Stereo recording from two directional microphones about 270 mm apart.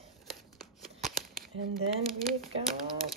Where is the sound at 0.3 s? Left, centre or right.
Centre.